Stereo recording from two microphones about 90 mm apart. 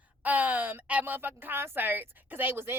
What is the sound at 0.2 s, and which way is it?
A woman's voice, 15° right (ahead or behind).